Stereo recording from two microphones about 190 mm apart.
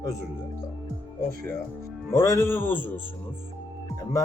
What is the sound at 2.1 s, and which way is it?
Speech, 15° left (ahead or behind).